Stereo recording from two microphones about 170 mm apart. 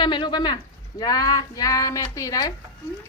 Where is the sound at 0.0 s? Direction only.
25° left (ahead or behind).